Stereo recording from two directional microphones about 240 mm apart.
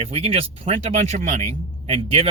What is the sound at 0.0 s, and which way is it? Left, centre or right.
Speech, right.